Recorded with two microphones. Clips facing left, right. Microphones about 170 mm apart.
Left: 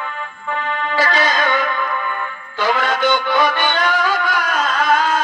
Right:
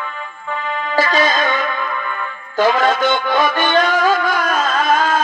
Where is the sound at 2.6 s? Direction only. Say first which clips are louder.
Right 4 dB; 40° right (ahead or behind).